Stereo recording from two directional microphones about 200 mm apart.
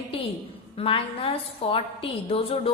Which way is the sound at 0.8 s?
25° left (ahead or behind).